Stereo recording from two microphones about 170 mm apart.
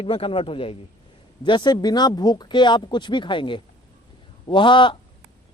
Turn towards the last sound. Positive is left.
turn(degrees=30)  # may be behind; listen again after turning